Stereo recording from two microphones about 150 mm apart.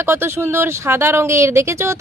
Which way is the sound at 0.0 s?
15° right (ahead or behind).